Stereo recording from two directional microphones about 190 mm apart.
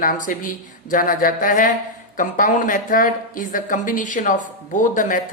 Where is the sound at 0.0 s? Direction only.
45° left (ahead or behind).